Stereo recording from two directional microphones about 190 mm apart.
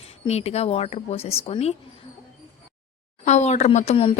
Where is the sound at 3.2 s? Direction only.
35° left (ahead or behind).